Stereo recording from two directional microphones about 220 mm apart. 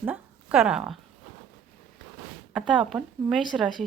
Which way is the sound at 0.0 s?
5° right (ahead or behind).